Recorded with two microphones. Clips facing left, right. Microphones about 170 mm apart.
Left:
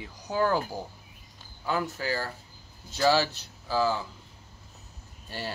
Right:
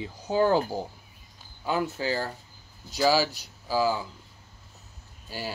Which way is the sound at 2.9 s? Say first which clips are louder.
Right 1 dB; 5° right (ahead or behind).